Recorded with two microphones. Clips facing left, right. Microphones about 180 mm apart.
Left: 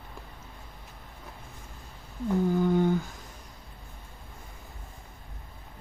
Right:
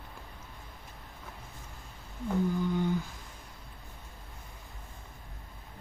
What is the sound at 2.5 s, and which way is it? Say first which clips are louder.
Humming: left 6 dB; 50° left (ahead or behind).